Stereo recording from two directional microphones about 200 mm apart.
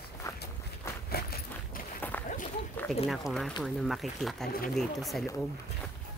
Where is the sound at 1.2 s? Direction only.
50° left (ahead or behind).